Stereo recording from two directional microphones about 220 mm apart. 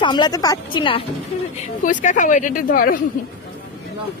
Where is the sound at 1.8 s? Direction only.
35° left (ahead or behind).